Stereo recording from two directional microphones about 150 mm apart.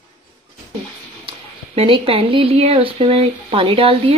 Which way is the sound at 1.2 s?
40° right (ahead or behind).